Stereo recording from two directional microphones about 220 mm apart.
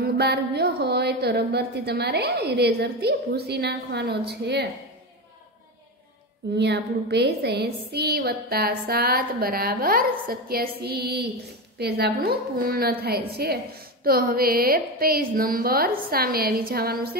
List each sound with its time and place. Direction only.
0.0 s a woman's voice: 45° right (ahead or behind)
6.5 s a woman's voice: 50° right (ahead or behind)